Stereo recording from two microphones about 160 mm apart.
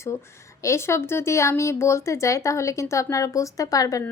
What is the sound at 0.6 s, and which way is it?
Speech, 15° left (ahead or behind).